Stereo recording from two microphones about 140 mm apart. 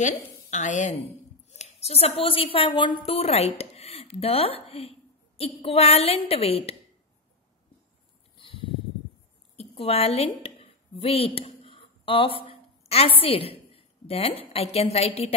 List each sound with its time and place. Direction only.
0.0 s a woman's voice: 60° left (ahead or behind)
1.5 s a woman's voice: 50° left (ahead or behind)
8.4 s a sound: 40° left (ahead or behind)
9.6 s speech: 45° left (ahead or behind)